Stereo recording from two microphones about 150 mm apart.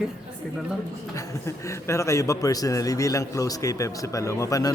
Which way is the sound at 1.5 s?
20° left (ahead or behind).